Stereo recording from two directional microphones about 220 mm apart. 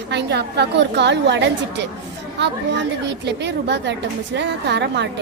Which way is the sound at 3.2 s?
50° right (ahead or behind).